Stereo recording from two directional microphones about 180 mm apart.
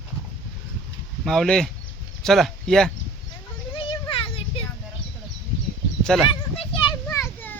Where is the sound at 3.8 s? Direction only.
30° left (ahead or behind).